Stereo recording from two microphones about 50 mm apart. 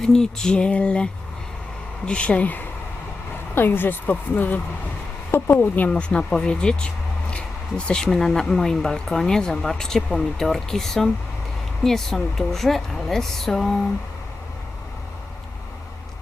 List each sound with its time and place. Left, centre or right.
0.0 s speech: centre; by 2.6 s left
3.5 s speech: left
5.9 s a woman's voice: left; by 13.7 s centre